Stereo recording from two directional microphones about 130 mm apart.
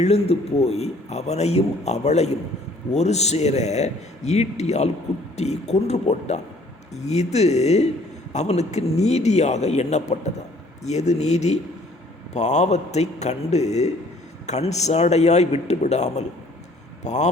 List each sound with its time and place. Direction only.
0.0 s a man's voice: 50° left (ahead or behind)